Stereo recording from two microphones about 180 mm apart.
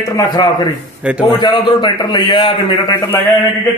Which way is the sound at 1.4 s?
25° left (ahead or behind).